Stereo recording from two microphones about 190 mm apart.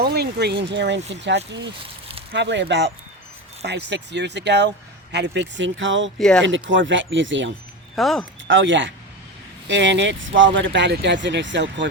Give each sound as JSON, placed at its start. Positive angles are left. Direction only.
{"t": 0.0, "sound": "speech", "side_deg": -55}
{"t": 6.1, "sound": "speech", "side_deg": 5}
{"t": 6.4, "sound": "speech", "side_deg": -75}
{"t": 7.9, "sound": "speech", "side_deg": 0}
{"t": 8.4, "sound": "speech", "side_deg": -75}